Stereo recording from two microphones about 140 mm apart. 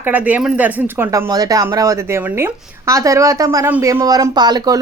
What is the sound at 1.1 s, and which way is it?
A woman's voice, 25° right (ahead or behind).